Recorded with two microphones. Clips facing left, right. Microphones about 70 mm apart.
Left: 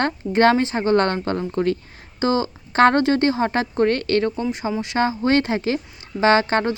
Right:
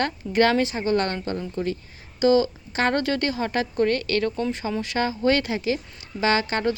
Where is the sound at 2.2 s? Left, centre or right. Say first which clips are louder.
Right 2 dB; left.